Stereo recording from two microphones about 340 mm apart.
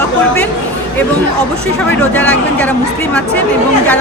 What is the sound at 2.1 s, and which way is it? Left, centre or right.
Speech, centre.